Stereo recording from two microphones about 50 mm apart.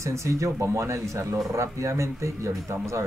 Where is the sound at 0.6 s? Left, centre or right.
Right.